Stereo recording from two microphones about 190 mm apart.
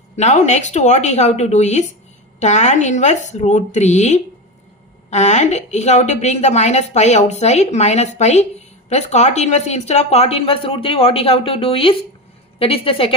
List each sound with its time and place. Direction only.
0.2 s a woman's voice: 35° left (ahead or behind)